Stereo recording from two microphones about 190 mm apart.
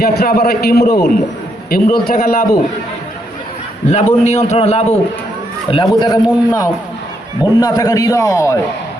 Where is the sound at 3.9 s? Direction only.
40° left (ahead or behind); by 6.2 s 25° left (ahead or behind).